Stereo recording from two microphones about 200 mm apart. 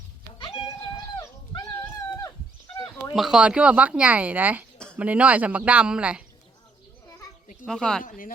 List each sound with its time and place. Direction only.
0.3 s dog: 25° left (ahead or behind)
3.1 s speech: centre (ahead or behind)
7.6 s speech: 5° left (ahead or behind)
8.0 s speech: 40° left (ahead or behind)